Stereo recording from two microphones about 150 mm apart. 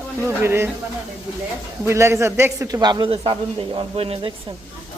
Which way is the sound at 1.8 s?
15° right (ahead or behind).